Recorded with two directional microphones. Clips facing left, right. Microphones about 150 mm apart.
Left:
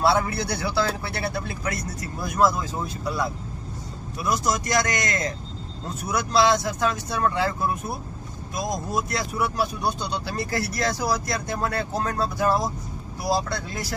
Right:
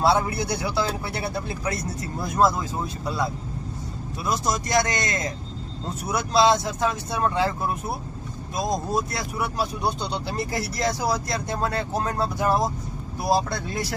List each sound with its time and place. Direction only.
0.0 s speech: 20° right (ahead or behind)